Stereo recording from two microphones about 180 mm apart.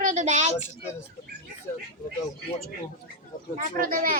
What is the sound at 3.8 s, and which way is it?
Speech, 50° right (ahead or behind).